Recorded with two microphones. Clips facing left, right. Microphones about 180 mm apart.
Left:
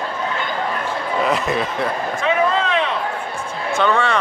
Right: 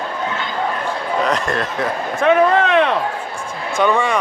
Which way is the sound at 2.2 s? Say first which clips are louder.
Right 6 dB; 60° right (ahead or behind).